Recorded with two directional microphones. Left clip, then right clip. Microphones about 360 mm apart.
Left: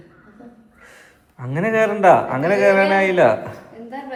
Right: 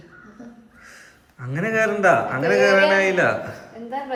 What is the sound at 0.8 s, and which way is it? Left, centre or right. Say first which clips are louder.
A man's voice: even; centre.